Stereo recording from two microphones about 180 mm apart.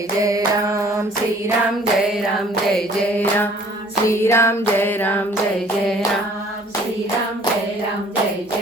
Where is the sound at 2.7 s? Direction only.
10° left (ahead or behind).